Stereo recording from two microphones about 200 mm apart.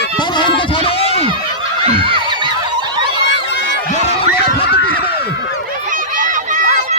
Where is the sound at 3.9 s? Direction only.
30° left (ahead or behind).